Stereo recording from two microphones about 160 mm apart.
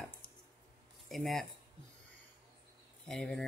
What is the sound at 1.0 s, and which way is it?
Speech, centre (ahead or behind).